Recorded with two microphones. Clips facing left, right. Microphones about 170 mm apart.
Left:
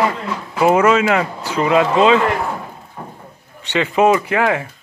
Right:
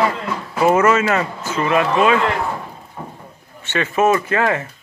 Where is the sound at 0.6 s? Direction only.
15° left (ahead or behind).